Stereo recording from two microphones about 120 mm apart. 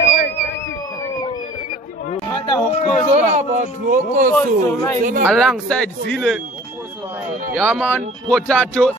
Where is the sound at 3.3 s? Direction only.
90° right.